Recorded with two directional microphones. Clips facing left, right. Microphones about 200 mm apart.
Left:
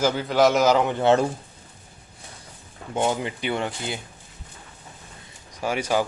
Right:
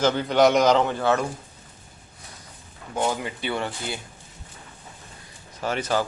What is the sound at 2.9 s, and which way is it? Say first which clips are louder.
Speech: left 2 dB; 25° left (ahead or behind).